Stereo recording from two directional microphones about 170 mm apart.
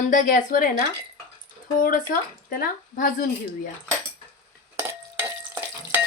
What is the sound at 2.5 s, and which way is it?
Speech, 55° left (ahead or behind).